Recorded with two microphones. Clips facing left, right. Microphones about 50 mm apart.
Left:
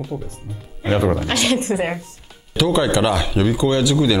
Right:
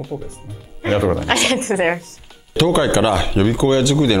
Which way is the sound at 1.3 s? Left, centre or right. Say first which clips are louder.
Right 2 dB; right.